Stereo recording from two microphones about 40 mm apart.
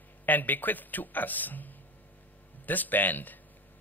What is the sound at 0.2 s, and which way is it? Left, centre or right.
A man's voice, left.